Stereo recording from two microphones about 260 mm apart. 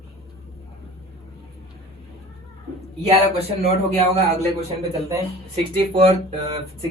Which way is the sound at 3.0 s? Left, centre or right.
Right.